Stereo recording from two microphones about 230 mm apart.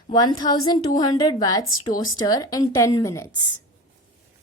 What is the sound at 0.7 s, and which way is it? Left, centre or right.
A woman's voice, centre.